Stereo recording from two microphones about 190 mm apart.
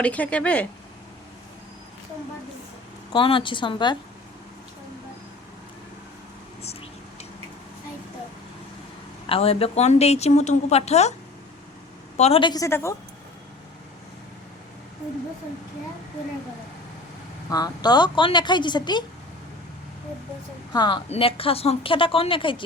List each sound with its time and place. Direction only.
0.0 s speech: 5° left (ahead or behind)
3.1 s a woman's voice: 25° left (ahead or behind)
9.2 s speech: 30° left (ahead or behind)
12.1 s a woman's voice: 35° left (ahead or behind); by 13.0 s 15° left (ahead or behind)
17.5 s a woman's voice: 20° left (ahead or behind)
20.7 s a woman's voice: 25° left (ahead or behind)